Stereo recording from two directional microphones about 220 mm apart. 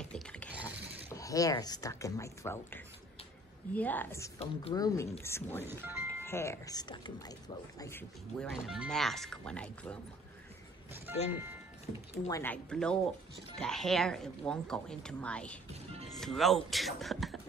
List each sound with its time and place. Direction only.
0.0 s mechanisms: 5° left (ahead or behind)
0.5 s mechanisms: 5° right (ahead or behind)
1.1 s a woman's voice: 15° left (ahead or behind)
4.4 s a woman's voice: 20° left (ahead or behind)
5.7 s music: 10° right (ahead or behind)
6.2 s a woman's voice: 10° left (ahead or behind)
8.6 s speech: centre (ahead or behind)
11.2 s speech: 10° right (ahead or behind)
12.3 s speech: 10° left (ahead or behind)
15.7 s music: 30° right (ahead or behind)
16.2 s speech: centre (ahead or behind)